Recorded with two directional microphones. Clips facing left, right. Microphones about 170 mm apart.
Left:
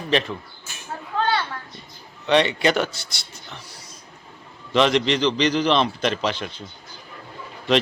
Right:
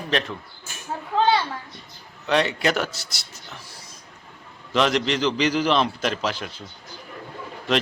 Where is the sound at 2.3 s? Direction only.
Centre (ahead or behind).